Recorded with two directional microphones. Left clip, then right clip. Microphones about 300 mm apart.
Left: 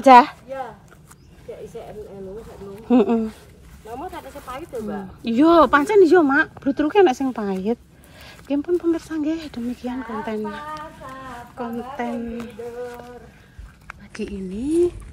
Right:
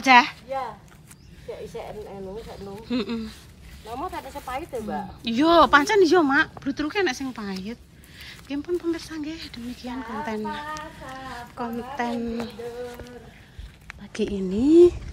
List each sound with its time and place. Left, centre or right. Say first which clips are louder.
0.0 s speech: left 6 dB; centre
2.9 s speech: left 12 dB; centre
3.9 s speech: right 1 dB; right
5.2 s speech: left 3 dB; centre
14.3 s speech: right 5 dB; right